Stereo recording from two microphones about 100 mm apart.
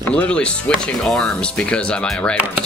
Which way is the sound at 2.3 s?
15° right (ahead or behind).